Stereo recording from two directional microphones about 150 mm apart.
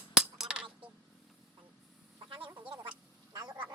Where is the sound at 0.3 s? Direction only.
5° right (ahead or behind).